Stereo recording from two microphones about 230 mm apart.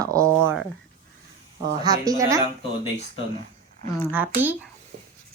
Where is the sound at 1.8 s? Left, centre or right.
Centre.